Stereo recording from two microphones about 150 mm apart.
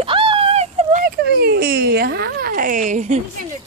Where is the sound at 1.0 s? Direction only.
90° right; by 3.2 s 55° right (ahead or behind).